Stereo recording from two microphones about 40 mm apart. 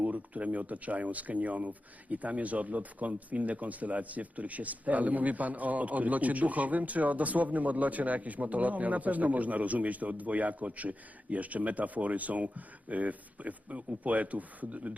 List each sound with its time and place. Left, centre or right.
0.0 s speech: right